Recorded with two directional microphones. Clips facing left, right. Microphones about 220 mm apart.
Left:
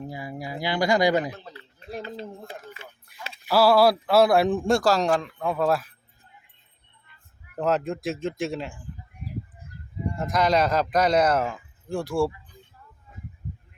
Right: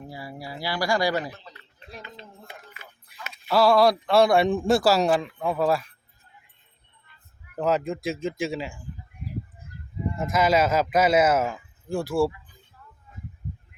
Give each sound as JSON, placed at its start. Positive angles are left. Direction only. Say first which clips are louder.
{"t": 0.1, "sound": "speech", "louder": "left 3 dB", "side_deg": 20}
{"t": 2.0, "sound": "a sound", "louder": "left 9 dB", "side_deg": 35}
{"t": 3.1, "sound": "tick-tock", "louder": "right 1 dB", "side_deg": 0}
{"t": 3.4, "sound": "a man's voice", "louder": "even", "side_deg": 5}
{"t": 7.6, "sound": "a man's voice", "louder": "even", "side_deg": 0}
{"t": 10.2, "sound": "a man's voice", "louder": "right 1 dB", "side_deg": -5}